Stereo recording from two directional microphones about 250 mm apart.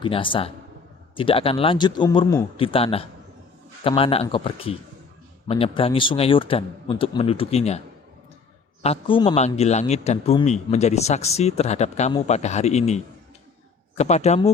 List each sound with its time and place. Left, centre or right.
0.0 s a man's voice: centre
8.8 s a man's voice: left